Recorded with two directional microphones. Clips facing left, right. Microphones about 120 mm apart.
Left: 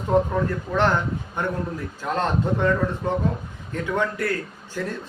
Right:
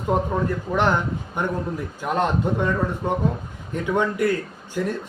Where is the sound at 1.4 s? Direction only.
15° right (ahead or behind).